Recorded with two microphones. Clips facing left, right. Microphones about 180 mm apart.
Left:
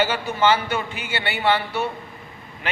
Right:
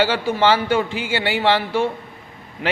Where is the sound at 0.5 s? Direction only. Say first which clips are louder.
Right 5 dB; 90° right.